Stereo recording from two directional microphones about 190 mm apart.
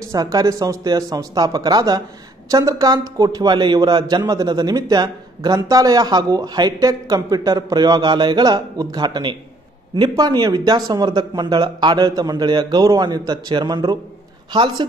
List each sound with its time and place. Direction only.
0.1 s a man's voice: 20° right (ahead or behind)